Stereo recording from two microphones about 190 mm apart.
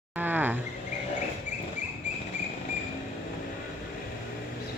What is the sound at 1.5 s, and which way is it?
Rodents, 40° left (ahead or behind).